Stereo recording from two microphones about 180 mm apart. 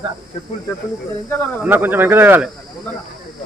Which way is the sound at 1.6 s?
10° right (ahead or behind).